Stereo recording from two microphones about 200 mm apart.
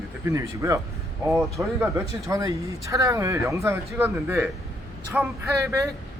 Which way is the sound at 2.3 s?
15° right (ahead or behind).